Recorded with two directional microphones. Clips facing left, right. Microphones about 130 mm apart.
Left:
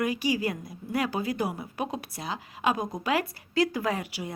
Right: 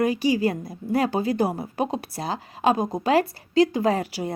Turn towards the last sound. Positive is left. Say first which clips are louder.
# right 7 dB
turn(degrees=-35)  # may be behind; listen again after turning